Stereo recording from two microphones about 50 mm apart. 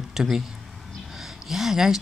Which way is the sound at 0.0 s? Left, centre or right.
Centre.